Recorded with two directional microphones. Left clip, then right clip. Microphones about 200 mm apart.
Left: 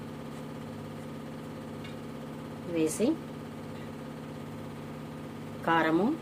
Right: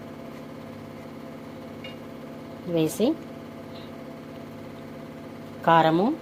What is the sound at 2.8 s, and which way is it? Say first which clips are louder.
Speech: right 4 dB; 15° right (ahead or behind).